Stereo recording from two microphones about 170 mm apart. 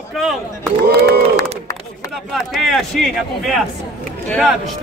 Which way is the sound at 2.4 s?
Centre (ahead or behind).